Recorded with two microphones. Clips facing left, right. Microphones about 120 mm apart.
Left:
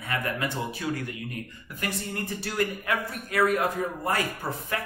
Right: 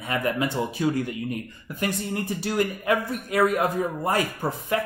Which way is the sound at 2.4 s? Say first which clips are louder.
Right 3 dB; 20° right (ahead or behind).